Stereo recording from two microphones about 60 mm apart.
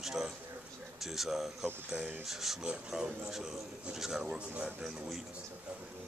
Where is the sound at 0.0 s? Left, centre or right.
Centre.